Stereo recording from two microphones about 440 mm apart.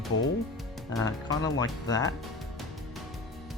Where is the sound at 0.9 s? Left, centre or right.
Centre.